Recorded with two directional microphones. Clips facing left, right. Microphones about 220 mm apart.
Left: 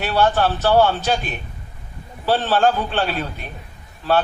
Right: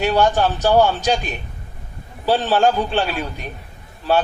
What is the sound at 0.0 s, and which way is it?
A man's voice, 15° right (ahead or behind).